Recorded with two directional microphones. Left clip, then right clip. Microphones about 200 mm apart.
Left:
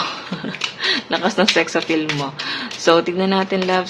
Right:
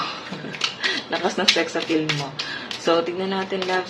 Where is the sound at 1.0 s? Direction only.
20° left (ahead or behind).